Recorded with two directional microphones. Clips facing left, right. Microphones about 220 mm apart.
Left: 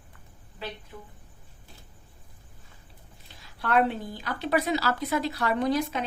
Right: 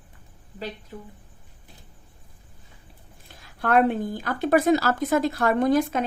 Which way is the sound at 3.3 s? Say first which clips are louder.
Right 5 dB; 50° right (ahead or behind).